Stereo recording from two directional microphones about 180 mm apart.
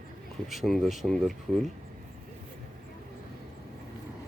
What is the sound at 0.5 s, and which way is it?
Speech, centre (ahead or behind).